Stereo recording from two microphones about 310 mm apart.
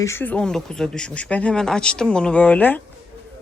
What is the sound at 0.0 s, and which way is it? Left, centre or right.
Speech, centre.